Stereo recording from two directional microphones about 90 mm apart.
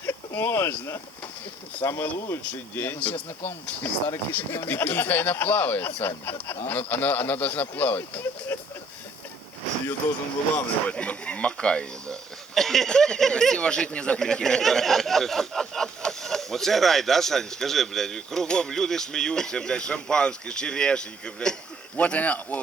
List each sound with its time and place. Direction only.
0.0 s speech: 25° left (ahead or behind)
10.5 s speech: 15° left (ahead or behind)